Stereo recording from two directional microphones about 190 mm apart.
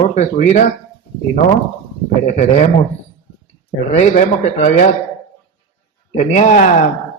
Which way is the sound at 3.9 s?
35° left (ahead or behind).